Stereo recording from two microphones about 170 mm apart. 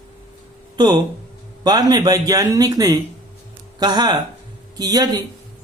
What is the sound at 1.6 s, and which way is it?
Speech, 25° right (ahead or behind).